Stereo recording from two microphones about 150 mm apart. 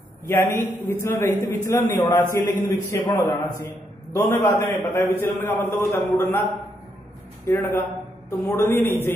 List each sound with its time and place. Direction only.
0.3 s a man's voice: 15° left (ahead or behind)
7.4 s a man's voice: 15° left (ahead or behind)